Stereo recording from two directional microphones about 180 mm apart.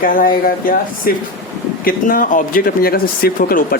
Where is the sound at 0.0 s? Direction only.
50° left (ahead or behind).